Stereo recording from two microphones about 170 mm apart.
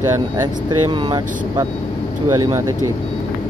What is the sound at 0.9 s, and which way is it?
Speech, 25° right (ahead or behind).